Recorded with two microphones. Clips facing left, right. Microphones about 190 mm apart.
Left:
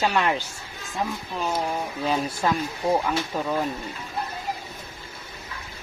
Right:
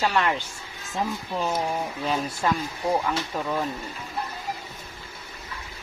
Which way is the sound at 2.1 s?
10° left (ahead or behind).